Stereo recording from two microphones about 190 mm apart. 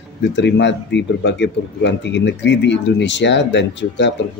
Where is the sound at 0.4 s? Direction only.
65° left (ahead or behind).